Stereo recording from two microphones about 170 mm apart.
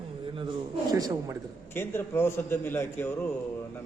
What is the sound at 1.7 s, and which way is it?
A man's voice, 15° left (ahead or behind).